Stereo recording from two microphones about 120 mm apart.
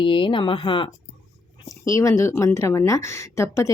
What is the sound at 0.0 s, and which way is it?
Speech, 45° left (ahead or behind).